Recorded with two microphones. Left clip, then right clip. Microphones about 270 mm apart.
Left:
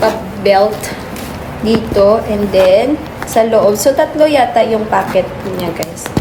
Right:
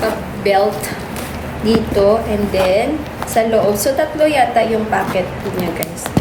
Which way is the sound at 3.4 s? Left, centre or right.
Centre.